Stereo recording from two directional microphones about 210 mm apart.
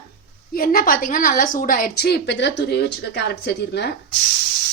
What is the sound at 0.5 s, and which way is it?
Speech, 45° left (ahead or behind).